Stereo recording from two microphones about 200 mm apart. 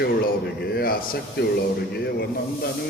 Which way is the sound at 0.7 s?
50° left (ahead or behind).